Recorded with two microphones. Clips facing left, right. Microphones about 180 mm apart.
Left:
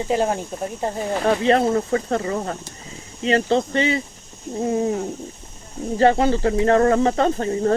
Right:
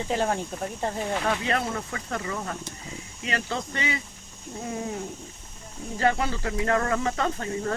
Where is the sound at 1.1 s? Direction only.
40° left (ahead or behind).